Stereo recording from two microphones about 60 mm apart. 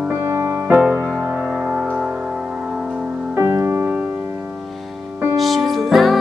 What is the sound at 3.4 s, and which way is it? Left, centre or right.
Music, right.